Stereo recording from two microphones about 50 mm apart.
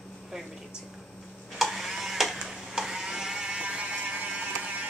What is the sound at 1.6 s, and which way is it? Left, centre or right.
Printer, centre.